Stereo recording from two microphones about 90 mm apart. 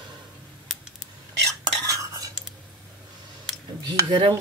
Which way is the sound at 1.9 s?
40° right (ahead or behind).